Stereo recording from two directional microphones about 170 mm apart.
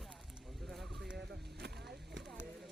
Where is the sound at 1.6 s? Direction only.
75° right (ahead or behind).